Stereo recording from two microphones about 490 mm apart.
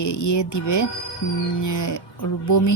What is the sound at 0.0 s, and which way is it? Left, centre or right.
Speech, left.